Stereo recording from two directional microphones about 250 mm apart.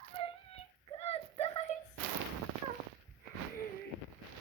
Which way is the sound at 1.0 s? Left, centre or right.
Left.